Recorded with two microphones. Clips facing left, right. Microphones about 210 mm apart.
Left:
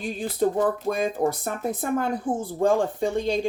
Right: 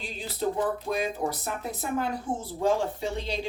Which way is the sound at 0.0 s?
50° left (ahead or behind).